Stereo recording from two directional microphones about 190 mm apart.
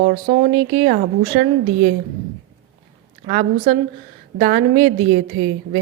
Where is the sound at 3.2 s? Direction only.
50° right (ahead or behind).